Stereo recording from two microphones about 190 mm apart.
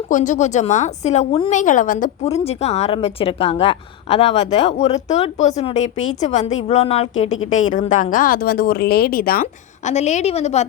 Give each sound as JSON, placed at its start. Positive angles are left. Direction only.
{"t": 0.1, "sound": "a woman's voice", "side_deg": 40}